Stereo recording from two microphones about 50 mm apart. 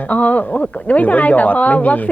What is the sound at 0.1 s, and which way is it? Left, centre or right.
A woman's voice, left.